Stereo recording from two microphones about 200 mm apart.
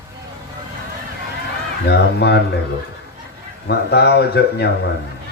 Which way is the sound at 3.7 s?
55° left (ahead or behind).